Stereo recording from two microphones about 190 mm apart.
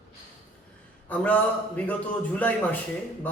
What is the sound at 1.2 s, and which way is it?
A man's voice, 10° left (ahead or behind).